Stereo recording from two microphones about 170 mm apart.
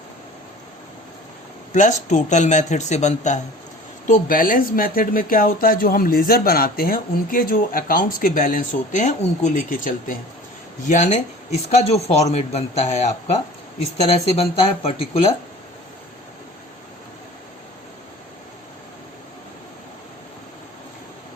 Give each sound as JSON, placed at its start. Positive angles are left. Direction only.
{"t": 1.7, "sound": "speech", "side_deg": 45}